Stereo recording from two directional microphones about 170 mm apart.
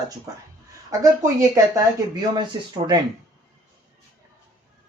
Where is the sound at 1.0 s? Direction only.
20° right (ahead or behind).